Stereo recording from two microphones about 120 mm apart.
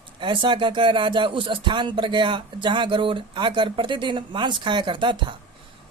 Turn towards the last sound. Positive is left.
turn(degrees=-40)  # may be behind; listen again after turning